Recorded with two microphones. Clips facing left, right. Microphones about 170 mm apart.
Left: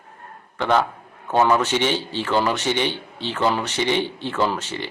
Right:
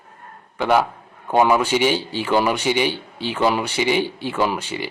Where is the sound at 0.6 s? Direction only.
10° right (ahead or behind).